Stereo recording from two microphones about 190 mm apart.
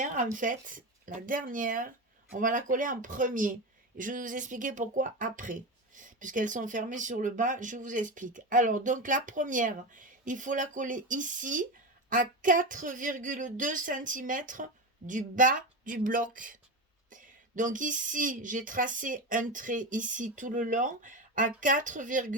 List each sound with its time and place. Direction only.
0.0 s speech: 40° right (ahead or behind)